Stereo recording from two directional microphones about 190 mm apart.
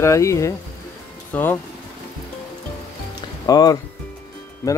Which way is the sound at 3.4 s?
20° left (ahead or behind).